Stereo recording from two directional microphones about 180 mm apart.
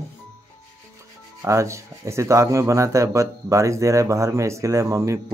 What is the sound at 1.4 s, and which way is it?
Speech, 15° right (ahead or behind).